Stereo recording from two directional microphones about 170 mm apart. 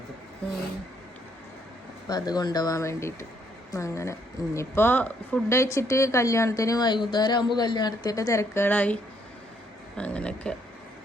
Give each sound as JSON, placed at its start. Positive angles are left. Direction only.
{"t": 2.0, "sound": "a woman's voice", "side_deg": 25}
{"t": 10.0, "sound": "a woman's voice", "side_deg": 5}